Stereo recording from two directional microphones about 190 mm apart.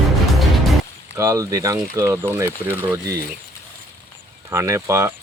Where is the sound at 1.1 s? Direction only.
15° right (ahead or behind).